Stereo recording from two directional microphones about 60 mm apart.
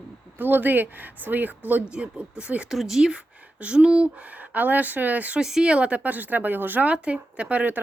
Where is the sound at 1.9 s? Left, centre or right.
Centre.